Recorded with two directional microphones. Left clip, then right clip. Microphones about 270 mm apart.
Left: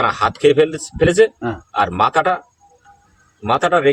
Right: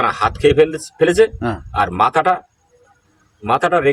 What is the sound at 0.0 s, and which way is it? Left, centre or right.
A man's voice, centre.